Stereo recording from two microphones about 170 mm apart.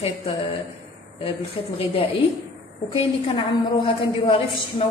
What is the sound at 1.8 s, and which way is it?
A woman's voice, 30° left (ahead or behind).